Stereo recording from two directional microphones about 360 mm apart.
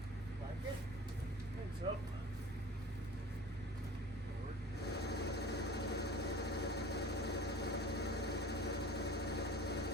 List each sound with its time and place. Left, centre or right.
5.0 s vehicle: left